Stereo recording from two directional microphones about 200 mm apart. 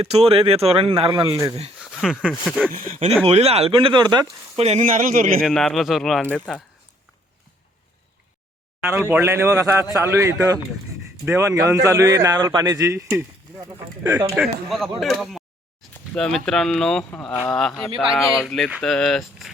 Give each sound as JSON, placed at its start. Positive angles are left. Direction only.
{"t": 0.0, "sound": "speech", "side_deg": -30}
{"t": 2.0, "sound": "speech", "side_deg": -5}
{"t": 2.7, "sound": "speech", "side_deg": -40}
{"t": 5.4, "sound": "speech", "side_deg": 0}
{"t": 8.9, "sound": "a man's voice", "side_deg": -10}
{"t": 14.3, "sound": "speech", "side_deg": 0}